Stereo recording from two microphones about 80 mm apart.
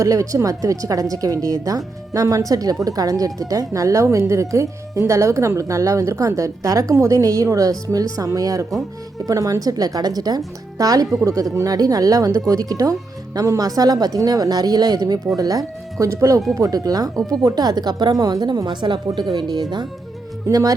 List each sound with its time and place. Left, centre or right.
0.0 s a woman's voice: right
19.0 s a woman's voice: right
20.5 s speech: right